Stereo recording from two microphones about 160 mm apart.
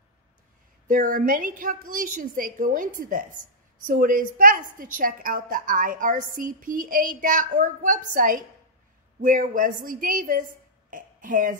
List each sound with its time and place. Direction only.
0.8 s a woman's voice: 55° right (ahead or behind)
10.9 s burping: 55° right (ahead or behind)